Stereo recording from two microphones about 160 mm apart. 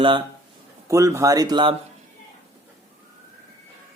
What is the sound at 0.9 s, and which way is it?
Speech, 20° right (ahead or behind).